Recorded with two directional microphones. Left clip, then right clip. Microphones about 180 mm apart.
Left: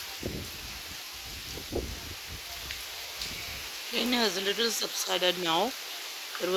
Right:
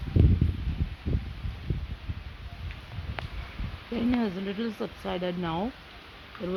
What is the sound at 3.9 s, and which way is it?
Speech, 10° left (ahead or behind).